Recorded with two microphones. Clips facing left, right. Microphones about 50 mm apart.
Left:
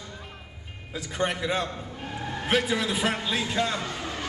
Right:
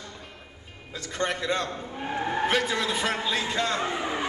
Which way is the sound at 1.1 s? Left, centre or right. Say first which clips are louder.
Even; centre.